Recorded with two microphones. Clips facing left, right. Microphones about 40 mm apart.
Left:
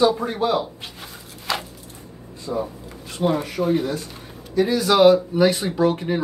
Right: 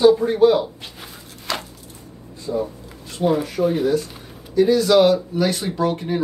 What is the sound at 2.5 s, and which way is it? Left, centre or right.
Speech, left.